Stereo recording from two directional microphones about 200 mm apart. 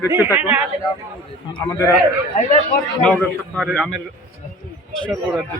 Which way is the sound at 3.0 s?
5° left (ahead or behind).